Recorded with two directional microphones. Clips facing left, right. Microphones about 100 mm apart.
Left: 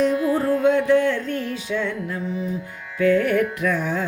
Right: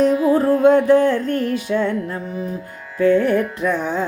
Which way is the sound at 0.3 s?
65° right (ahead or behind).